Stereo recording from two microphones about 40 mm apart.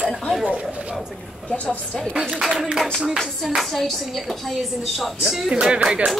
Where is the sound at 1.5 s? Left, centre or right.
Left.